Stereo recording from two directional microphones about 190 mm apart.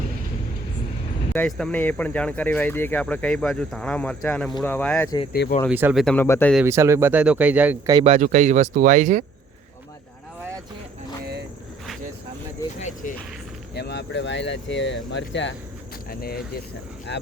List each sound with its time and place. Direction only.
1.3 s speech: 5° left (ahead or behind)
5.3 s speech: 55° left (ahead or behind)
5.6 s speech: 5° right (ahead or behind)
6.1 s speech: 10° left (ahead or behind)
6.7 s speech: 15° right (ahead or behind)
8.0 s speech: 35° right (ahead or behind)
12.8 s music: 45° left (ahead or behind)
13.7 s speech: 60° left (ahead or behind)
16.0 s speech: 55° left (ahead or behind)
17.1 s speech: 65° left (ahead or behind)